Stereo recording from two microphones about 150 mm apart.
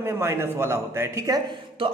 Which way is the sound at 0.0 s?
15° right (ahead or behind).